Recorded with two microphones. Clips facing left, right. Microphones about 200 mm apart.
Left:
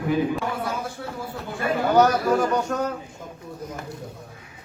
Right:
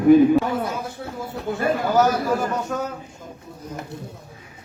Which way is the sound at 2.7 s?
Centre (ahead or behind).